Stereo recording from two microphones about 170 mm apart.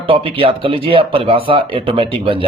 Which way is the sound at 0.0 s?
30° right (ahead or behind).